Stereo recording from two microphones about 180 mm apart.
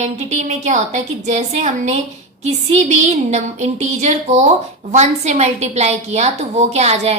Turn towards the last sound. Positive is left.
turn(degrees=-35)  # may be behind; listen again after turning